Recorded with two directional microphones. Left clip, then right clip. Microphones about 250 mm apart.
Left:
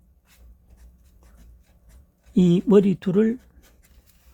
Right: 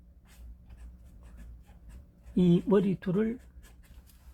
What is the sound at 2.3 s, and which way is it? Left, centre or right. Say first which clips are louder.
Speech: left 8 dB; left.